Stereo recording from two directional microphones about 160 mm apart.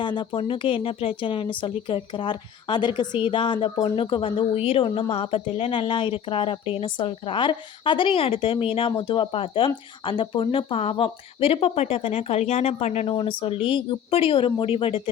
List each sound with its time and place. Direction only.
0.0 s speech: 30° left (ahead or behind)